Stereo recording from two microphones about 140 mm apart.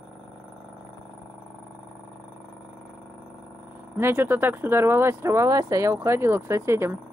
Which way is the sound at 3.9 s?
15° right (ahead or behind).